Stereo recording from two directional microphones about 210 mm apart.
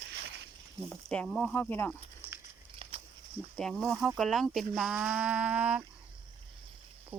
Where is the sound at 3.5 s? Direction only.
Centre (ahead or behind).